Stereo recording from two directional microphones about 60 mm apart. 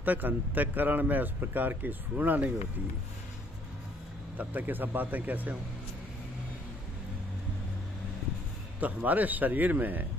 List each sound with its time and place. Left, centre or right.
0.0 s speech: right
4.4 s speech: right
8.7 s speech: right